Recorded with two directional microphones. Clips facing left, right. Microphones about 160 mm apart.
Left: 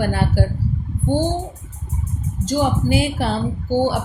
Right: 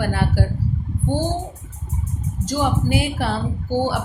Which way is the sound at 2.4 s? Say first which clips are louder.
Left 2 dB; 30° left (ahead or behind).